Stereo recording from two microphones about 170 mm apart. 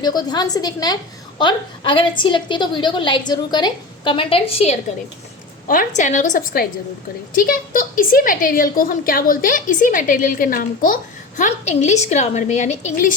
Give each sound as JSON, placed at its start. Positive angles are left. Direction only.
{"t": 0.0, "sound": "a woman's voice", "side_deg": 25}
{"t": 5.6, "sound": "a woman's voice", "side_deg": 50}